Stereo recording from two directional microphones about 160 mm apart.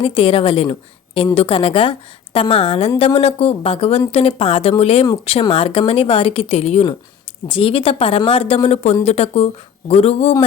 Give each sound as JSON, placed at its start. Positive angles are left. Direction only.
{"t": 0.0, "sound": "speech", "side_deg": 35}